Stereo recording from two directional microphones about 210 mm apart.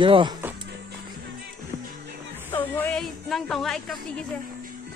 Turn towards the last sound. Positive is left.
turn(degrees=0)  # may be behind; listen again after turning